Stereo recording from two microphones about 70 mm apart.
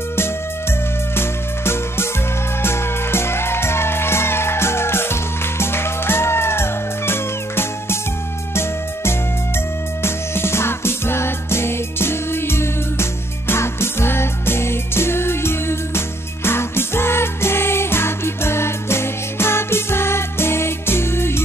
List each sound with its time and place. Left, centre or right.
1.1 s music: left
10.0 s music: left